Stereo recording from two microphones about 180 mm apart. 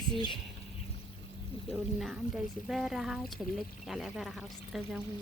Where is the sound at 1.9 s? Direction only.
Centre (ahead or behind).